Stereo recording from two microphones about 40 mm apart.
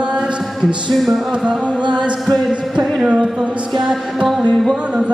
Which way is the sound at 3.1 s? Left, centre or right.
Right.